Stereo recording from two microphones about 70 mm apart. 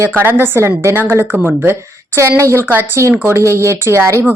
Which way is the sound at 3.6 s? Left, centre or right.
Right.